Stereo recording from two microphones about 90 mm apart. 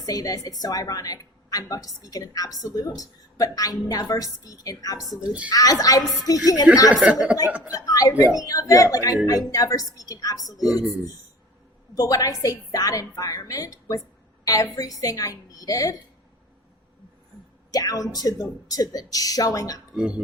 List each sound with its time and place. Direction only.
0.0 s a woman's voice: 45° left (ahead or behind)
7.0 s speech: 15° right (ahead or behind)
7.7 s a woman's voice: 40° left (ahead or behind)
17.7 s a woman's voice: 45° left (ahead or behind)
20.0 s speech: 10° right (ahead or behind)